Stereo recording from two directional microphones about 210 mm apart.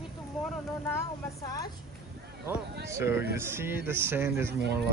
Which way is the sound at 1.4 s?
15° left (ahead or behind).